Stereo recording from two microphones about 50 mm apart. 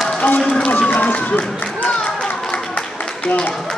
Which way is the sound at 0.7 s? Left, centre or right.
Left.